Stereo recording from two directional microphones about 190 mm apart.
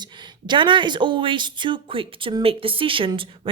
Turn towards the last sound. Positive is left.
turn(degrees=-25)  # may be behind; listen again after turning